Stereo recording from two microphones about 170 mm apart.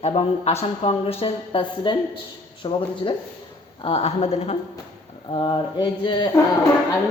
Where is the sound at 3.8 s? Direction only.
35° left (ahead or behind).